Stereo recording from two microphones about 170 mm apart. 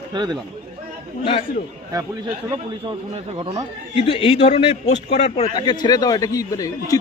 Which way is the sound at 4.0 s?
35° left (ahead or behind).